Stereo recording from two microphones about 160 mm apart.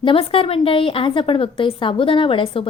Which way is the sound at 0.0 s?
35° left (ahead or behind).